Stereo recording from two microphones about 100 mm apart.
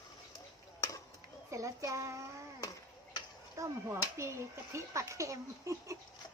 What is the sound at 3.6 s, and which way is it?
Speech, 25° right (ahead or behind).